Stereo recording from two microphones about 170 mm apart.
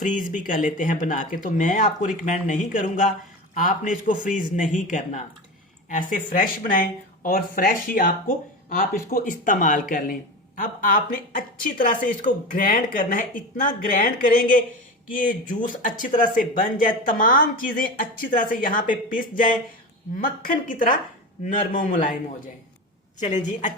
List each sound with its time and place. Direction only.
0.0 s speech: 50° left (ahead or behind)
23.5 s speech: 45° left (ahead or behind)